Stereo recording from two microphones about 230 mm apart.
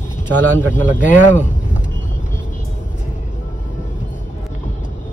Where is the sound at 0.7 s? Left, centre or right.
Left.